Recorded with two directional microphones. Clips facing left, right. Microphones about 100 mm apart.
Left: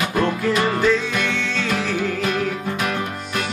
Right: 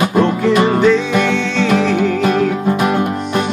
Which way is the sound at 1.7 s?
Centre (ahead or behind).